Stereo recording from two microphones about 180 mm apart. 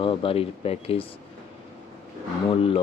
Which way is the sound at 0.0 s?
30° left (ahead or behind).